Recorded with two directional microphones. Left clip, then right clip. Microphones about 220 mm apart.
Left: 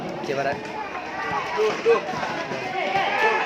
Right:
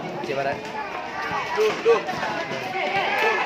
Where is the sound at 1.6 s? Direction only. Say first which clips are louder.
Right 1 dB; 40° right (ahead or behind).